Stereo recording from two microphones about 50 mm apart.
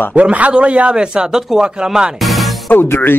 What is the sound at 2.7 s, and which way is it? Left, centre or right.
Speech, left.